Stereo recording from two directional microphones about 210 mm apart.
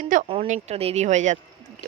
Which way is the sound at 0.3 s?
30° right (ahead or behind).